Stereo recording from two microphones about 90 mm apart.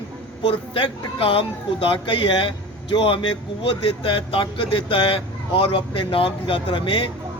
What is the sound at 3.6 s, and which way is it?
A man's voice, 85° left.